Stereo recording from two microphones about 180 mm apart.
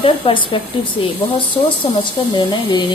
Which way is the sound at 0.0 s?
30° left (ahead or behind).